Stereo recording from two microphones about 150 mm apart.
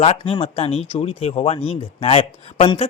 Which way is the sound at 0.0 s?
40° left (ahead or behind).